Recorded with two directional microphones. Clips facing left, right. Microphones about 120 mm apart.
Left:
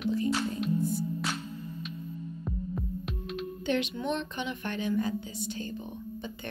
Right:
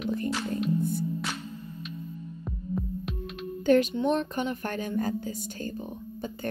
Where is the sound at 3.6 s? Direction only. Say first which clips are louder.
Right 8 dB; 45° right (ahead or behind).